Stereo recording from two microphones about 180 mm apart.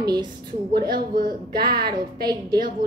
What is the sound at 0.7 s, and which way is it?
A woman's voice, 55° right (ahead or behind).